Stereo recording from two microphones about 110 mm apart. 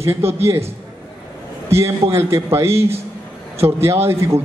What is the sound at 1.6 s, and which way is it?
A man's voice, 25° right (ahead or behind).